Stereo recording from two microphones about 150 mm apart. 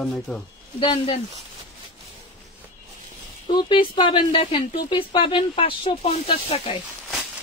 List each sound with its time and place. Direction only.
0.0 s speech: 5° left (ahead or behind)
0.7 s speech: 35° left (ahead or behind)
3.5 s speech: 35° left (ahead or behind)